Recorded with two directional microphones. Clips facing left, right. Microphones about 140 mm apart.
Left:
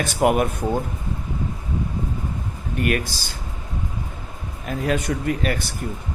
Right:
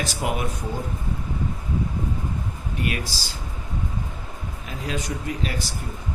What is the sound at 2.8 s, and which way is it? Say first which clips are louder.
Speech: left 6 dB; 55° left (ahead or behind).